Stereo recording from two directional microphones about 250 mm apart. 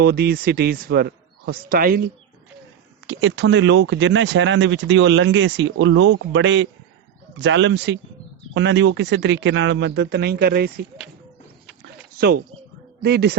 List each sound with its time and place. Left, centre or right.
0.0 s a man's voice: right
3.1 s speech: right
12.1 s a man's voice: right